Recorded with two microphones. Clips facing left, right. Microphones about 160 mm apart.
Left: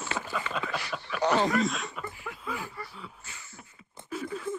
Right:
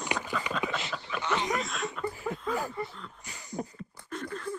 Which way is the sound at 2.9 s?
5° left (ahead or behind).